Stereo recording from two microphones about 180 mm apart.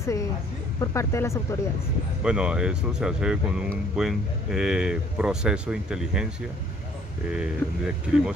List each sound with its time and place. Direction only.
0.0 s a woman's voice: 15° left (ahead or behind)
2.2 s speech: 5° right (ahead or behind)
7.2 s speech: 5° right (ahead or behind)